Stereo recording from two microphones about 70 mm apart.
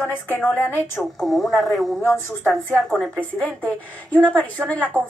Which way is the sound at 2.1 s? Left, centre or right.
Left.